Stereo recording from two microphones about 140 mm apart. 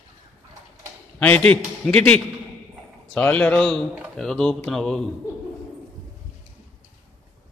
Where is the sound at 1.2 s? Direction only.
10° left (ahead or behind).